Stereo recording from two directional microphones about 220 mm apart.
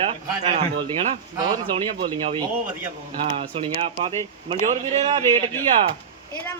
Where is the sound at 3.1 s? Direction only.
30° right (ahead or behind).